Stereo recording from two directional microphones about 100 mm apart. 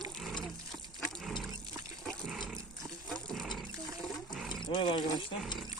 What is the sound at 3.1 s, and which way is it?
Roaring cats, centre (ahead or behind).